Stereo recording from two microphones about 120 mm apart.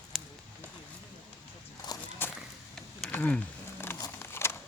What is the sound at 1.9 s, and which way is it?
Walk, 30° left (ahead or behind).